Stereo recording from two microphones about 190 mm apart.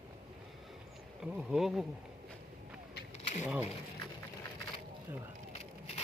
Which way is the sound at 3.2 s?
35° left (ahead or behind).